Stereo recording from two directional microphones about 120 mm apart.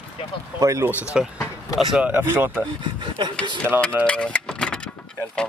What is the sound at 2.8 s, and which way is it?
Speech, 40° right (ahead or behind).